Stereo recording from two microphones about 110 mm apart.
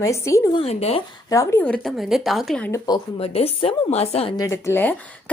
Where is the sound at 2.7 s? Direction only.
35° left (ahead or behind).